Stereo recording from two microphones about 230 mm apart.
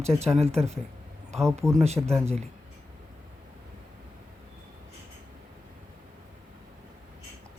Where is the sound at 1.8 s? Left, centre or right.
Right.